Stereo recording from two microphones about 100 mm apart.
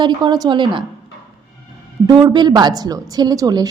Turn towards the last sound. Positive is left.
turn(degrees=-40)  # may be behind; listen again after turning